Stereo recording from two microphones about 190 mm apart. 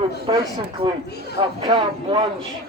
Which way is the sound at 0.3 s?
25° right (ahead or behind).